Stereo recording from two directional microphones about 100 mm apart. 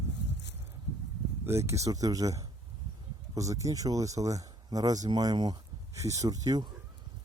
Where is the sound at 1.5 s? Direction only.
30° right (ahead or behind); by 5.5 s 45° right (ahead or behind).